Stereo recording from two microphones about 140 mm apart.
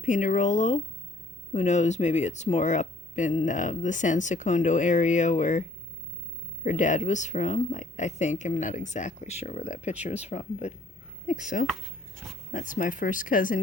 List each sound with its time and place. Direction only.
0.0 s speech: 65° left (ahead or behind)
6.7 s speech: 60° left (ahead or behind)
11.3 s speech: 65° left (ahead or behind)